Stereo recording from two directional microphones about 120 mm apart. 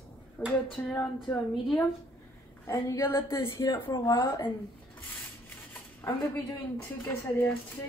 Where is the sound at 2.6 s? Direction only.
20° left (ahead or behind).